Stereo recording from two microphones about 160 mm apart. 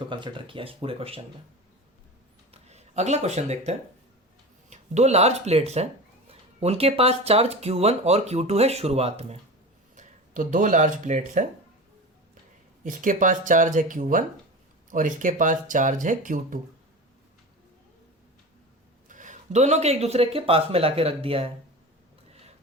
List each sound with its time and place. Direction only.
0.1 s speech: 30° right (ahead or behind)
2.5 s speech: 45° right (ahead or behind)
9.9 s speech: 55° right (ahead or behind)
12.8 s speech: 55° right (ahead or behind)
19.0 s speech: 55° right (ahead or behind); by 21.4 s 35° right (ahead or behind)